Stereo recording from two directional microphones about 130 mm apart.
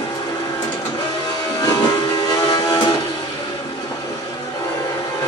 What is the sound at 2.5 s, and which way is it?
Music, 35° left (ahead or behind).